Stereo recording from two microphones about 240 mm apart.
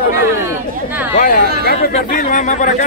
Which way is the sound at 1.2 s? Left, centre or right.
Left.